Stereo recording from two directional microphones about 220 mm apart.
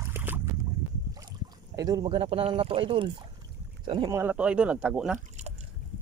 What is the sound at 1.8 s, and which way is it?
Speech, 15° right (ahead or behind).